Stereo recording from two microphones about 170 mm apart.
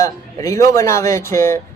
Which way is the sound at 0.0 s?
20° left (ahead or behind).